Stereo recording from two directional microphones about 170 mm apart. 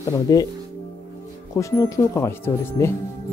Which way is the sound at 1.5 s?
20° left (ahead or behind).